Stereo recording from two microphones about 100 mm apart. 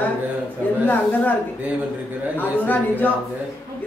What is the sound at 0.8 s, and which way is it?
Speech, 20° left (ahead or behind).